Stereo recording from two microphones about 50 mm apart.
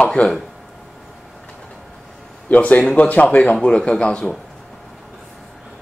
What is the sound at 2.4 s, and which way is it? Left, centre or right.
Speech, left.